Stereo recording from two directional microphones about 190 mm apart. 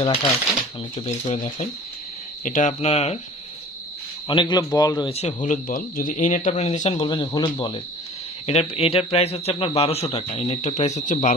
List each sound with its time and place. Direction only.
0.0 s speech: 25° left (ahead or behind)
0.9 s a man's voice: 35° left (ahead or behind)
4.3 s speech: 25° left (ahead or behind)
5.1 s a man's voice: 35° left (ahead or behind)
6.9 s a man's voice: 25° left (ahead or behind); by 11.3 s 40° left (ahead or behind)